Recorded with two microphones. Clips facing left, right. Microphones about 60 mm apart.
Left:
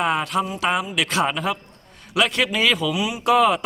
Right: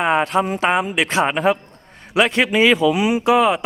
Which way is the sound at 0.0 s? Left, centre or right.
Right.